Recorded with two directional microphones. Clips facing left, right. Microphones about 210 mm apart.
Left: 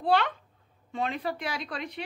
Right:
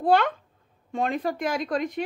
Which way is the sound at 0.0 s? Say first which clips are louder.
Right 4 dB; 45° right (ahead or behind).